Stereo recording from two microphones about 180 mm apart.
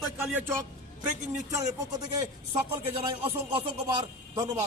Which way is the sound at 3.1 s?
30° right (ahead or behind).